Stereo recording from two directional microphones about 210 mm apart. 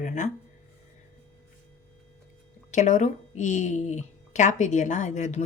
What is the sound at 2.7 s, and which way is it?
Speech, 35° left (ahead or behind).